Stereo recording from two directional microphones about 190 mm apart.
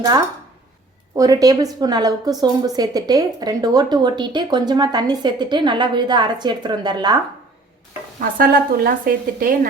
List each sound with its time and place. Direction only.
1.1 s a woman's voice: 20° right (ahead or behind)
8.2 s a woman's voice: 50° right (ahead or behind)